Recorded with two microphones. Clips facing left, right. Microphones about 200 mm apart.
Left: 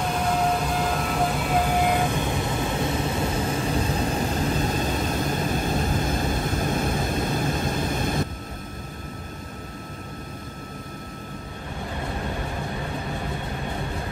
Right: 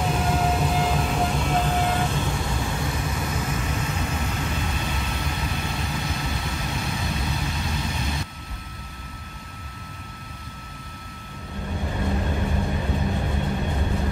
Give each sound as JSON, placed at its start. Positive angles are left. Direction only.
{"t": 0.1, "sound": "vehicle", "side_deg": -5}